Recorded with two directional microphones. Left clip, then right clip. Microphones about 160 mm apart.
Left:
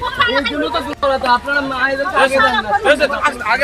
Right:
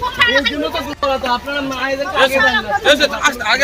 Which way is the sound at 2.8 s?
55° right (ahead or behind).